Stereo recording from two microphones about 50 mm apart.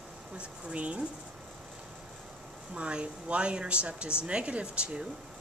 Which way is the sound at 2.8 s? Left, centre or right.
Right.